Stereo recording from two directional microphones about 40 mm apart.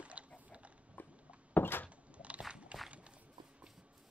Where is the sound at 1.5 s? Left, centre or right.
Left.